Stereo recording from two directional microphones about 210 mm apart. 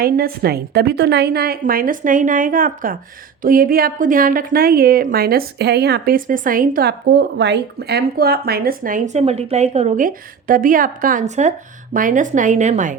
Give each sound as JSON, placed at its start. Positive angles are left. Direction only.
{"t": 0.0, "sound": "a woman's voice", "side_deg": -45}